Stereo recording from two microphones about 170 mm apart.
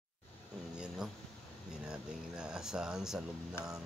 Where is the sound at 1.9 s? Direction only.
5° right (ahead or behind).